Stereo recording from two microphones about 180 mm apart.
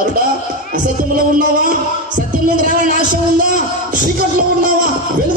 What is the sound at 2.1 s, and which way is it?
A man's voice, 50° right (ahead or behind).